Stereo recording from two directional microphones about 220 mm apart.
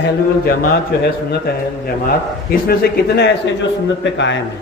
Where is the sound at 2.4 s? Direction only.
45° left (ahead or behind).